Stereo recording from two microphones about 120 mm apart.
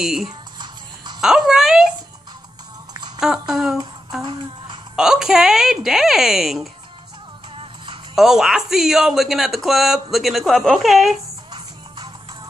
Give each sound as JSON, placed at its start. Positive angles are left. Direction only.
{"t": 0.0, "sound": "speech", "side_deg": -5}
{"t": 3.2, "sound": "speech", "side_deg": -5}
{"t": 4.2, "sound": "speech", "side_deg": -40}
{"t": 4.9, "sound": "speech", "side_deg": -5}
{"t": 7.5, "sound": "music", "side_deg": -40}
{"t": 8.2, "sound": "speech", "side_deg": -5}